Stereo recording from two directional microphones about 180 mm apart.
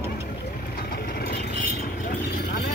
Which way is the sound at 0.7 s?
60° left (ahead or behind).